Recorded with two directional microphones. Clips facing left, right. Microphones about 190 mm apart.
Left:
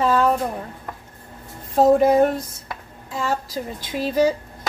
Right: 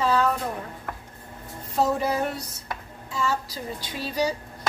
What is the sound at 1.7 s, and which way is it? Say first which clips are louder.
Speech: left 9 dB; 50° left (ahead or behind).